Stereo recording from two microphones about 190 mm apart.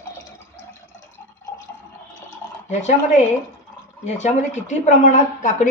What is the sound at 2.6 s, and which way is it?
Speech, 40° left (ahead or behind).